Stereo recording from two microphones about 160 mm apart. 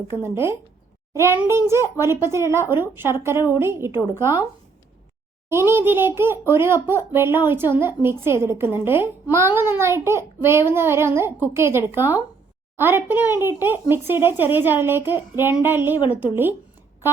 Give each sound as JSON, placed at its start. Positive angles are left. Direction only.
{"t": 0.1, "sound": "a child's voice", "side_deg": -15}
{"t": 5.5, "sound": "a child's voice", "side_deg": -15}